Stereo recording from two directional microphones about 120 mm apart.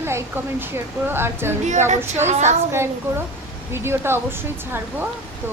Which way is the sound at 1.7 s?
85° right.